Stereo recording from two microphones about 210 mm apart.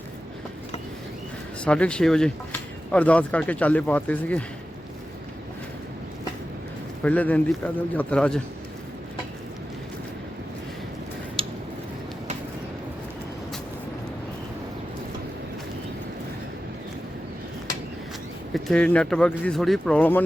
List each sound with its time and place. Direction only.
1.6 s speech: 5° left (ahead or behind)
7.0 s speech: 5° left (ahead or behind)
11.4 s a sound: 25° right (ahead or behind)
18.5 s speech: 5° left (ahead or behind)